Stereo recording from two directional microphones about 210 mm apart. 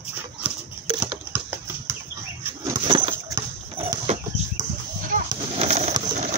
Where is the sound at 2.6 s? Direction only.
20° right (ahead or behind).